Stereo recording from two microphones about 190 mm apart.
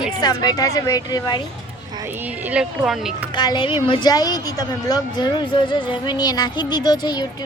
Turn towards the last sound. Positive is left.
turn(degrees=20)  # may be behind; listen again after turning